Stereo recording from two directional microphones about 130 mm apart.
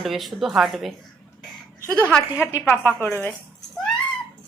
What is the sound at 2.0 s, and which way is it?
Speech, 15° left (ahead or behind).